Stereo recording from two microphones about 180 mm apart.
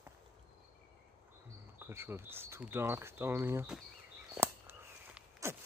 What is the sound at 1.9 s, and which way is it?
Speech, 15° right (ahead or behind).